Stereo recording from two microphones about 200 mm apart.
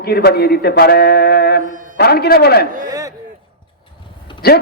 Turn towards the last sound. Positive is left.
turn(degrees=55)  # may be behind; listen again after turning